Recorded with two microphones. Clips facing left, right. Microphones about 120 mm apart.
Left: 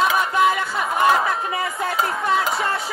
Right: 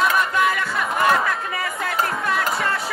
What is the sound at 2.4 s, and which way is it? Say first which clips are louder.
Music: left 1 dB; centre (ahead or behind).